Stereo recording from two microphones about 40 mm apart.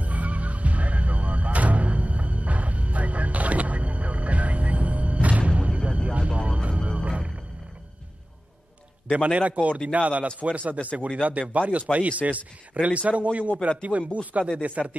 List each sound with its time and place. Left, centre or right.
0.0 s music: right
5.5 s music: right
9.1 s speech: right